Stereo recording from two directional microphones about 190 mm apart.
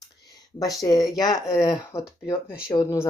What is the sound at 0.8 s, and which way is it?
Speech, 20° left (ahead or behind).